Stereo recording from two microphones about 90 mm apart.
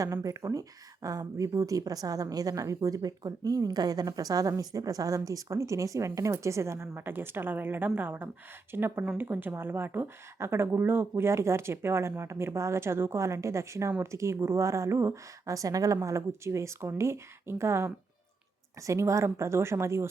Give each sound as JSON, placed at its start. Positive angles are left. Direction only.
{"t": 0.0, "sound": "a woman's voice", "side_deg": -35}